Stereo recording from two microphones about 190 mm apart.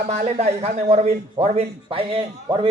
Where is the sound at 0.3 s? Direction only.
35° right (ahead or behind).